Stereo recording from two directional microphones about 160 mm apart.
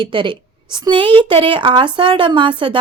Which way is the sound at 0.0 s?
30° right (ahead or behind).